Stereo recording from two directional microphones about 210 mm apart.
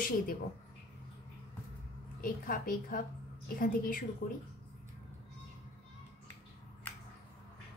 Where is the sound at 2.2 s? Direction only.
40° left (ahead or behind).